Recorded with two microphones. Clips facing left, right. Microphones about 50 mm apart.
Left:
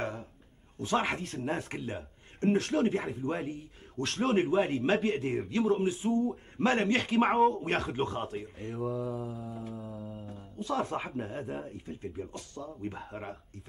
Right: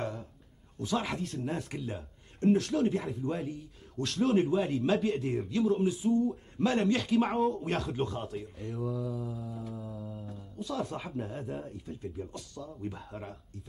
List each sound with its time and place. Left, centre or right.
0.0 s a sound: left
0.7 s a man's voice: left
1.0 s a man's voice: left
9.8 s mantra: left
10.3 s a sound: left
10.8 s speech: left
11.1 s speech: left